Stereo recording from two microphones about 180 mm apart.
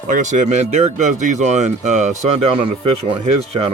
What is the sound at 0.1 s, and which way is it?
Speech, 40° right (ahead or behind).